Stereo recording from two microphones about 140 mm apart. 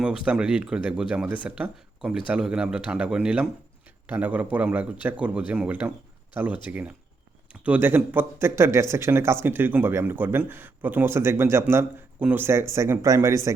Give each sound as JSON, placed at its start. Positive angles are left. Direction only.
{"t": 0.0, "sound": "speech", "side_deg": -5}